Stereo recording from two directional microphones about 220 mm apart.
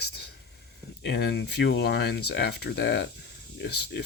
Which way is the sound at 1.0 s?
50° left (ahead or behind).